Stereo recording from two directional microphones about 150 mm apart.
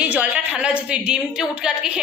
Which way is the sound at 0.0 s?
10° right (ahead or behind).